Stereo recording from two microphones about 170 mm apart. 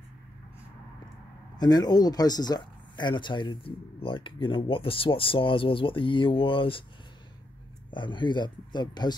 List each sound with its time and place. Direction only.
1.6 s speech: 25° left (ahead or behind)
7.9 s speech: 30° left (ahead or behind)